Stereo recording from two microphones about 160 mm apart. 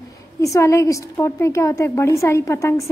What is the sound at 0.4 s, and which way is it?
A woman's voice, 20° left (ahead or behind).